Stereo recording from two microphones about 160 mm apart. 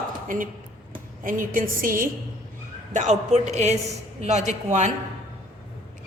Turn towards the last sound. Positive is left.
turn(degrees=-50)  # may be behind; listen again after turning